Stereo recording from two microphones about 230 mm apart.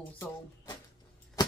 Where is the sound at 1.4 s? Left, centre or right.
Centre.